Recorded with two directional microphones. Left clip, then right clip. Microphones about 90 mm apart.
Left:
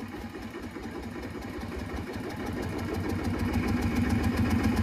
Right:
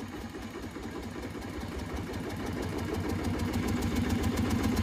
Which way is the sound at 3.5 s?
40° right (ahead or behind).